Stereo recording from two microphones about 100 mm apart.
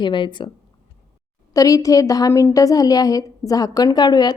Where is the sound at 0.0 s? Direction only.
50° left (ahead or behind).